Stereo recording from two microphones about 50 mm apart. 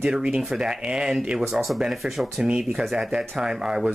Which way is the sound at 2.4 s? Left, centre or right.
Centre.